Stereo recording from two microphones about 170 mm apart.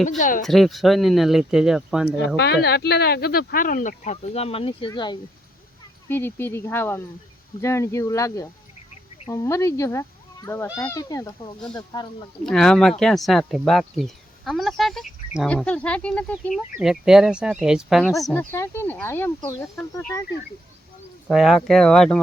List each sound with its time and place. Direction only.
0.2 s speech: 50° left (ahead or behind)
0.4 s speech: centre (ahead or behind)
2.0 s speech: 90° left
2.6 s speech: 70° left (ahead or behind); by 5.1 s 25° left (ahead or behind)
6.1 s speech: 15° left (ahead or behind)
12.5 s speech: 5° left (ahead or behind)
18.5 s speech: 15° left (ahead or behind)
21.2 s speech: centre (ahead or behind)